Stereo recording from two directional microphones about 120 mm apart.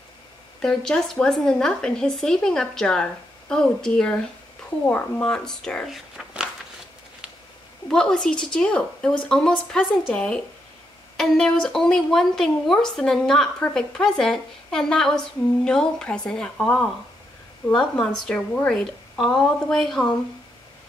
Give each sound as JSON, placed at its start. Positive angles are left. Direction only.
{"t": 0.6, "sound": "a woman's voice", "side_deg": 5}
{"t": 4.8, "sound": "a woman's voice", "side_deg": 15}
{"t": 5.2, "sound": "speech", "side_deg": 5}
{"t": 7.9, "sound": "a woman's voice", "side_deg": 5}